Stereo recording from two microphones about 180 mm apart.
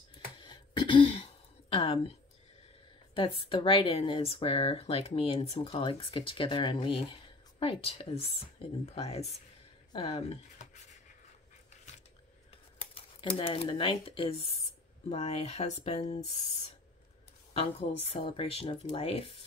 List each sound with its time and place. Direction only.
0.4 s throat clearing: 25° left (ahead or behind)
3.2 s speech: 30° left (ahead or behind)
12.9 s speech: 30° left (ahead or behind)